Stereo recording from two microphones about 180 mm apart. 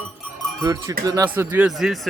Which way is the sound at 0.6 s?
15° right (ahead or behind).